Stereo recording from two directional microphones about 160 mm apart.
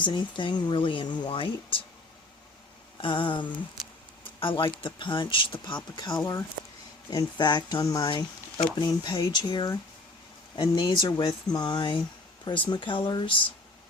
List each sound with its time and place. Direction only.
0.0 s speech: 30° left (ahead or behind)
3.0 s speech: 30° left (ahead or behind)
3.8 s speech: centre (ahead or behind)
4.2 s speech: 30° left (ahead or behind)